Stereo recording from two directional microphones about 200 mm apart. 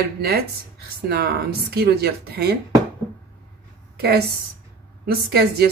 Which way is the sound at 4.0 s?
55° right (ahead or behind).